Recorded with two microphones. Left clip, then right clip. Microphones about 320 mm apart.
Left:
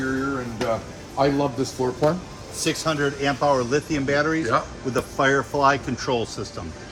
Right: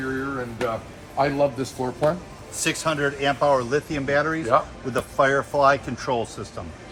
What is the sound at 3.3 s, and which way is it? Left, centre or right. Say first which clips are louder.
Speech: right 1 dB; right.